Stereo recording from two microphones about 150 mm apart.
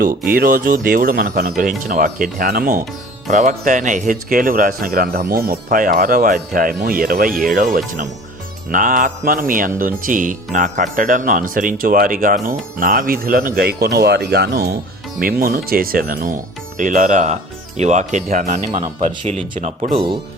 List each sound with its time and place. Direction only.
0.3 s speech: 70° right (ahead or behind)
3.2 s speech: 55° right (ahead or behind); by 14.8 s 90° right
15.2 s speech: 75° right (ahead or behind); by 19.9 s 50° right (ahead or behind)